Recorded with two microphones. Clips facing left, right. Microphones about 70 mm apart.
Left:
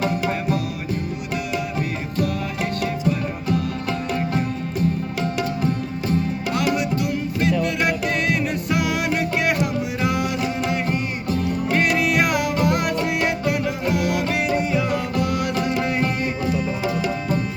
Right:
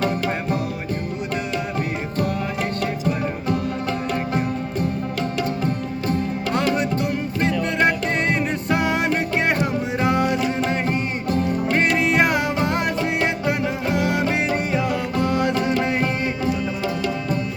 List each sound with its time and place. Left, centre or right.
6.1 s music: right
11.9 s music: right